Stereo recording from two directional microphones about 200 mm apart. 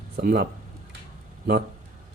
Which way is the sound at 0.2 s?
45° right (ahead or behind).